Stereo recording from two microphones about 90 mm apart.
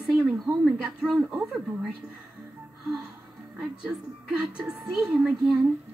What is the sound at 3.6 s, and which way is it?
A woman's voice, 5° right (ahead or behind).